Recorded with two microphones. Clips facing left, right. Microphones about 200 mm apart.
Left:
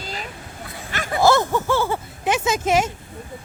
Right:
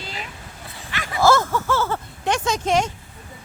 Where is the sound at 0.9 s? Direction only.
45° left (ahead or behind).